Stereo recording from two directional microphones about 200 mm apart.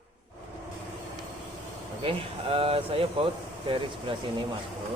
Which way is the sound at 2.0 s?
30° right (ahead or behind).